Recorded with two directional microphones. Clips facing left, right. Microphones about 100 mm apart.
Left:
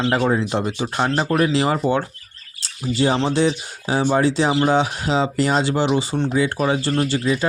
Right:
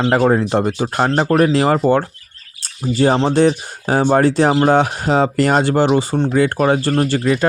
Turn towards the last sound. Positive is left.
turn(degrees=-45)  # may be behind; listen again after turning